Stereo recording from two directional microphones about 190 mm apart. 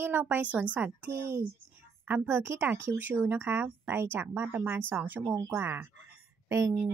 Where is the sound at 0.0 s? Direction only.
10° right (ahead or behind).